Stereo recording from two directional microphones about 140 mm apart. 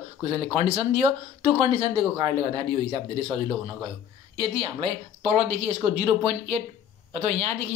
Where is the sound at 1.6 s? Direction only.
35° right (ahead or behind).